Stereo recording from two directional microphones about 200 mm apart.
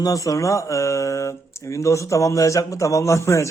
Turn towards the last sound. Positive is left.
turn(degrees=15)  # may be behind; listen again after turning